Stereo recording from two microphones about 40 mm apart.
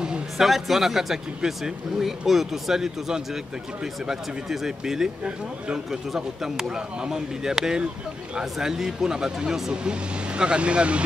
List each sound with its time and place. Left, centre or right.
0.4 s speech: centre; by 11.0 s right